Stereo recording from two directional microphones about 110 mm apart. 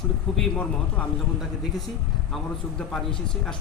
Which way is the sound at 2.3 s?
5° left (ahead or behind).